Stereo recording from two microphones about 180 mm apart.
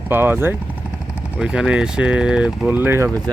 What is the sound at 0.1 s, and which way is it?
Speech, 10° right (ahead or behind).